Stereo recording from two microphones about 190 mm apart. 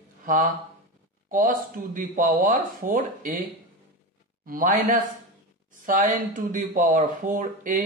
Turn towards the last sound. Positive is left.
turn(degrees=-45)  # may be behind; listen again after turning